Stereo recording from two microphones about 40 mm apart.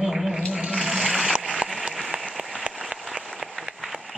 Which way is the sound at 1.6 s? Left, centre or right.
Right.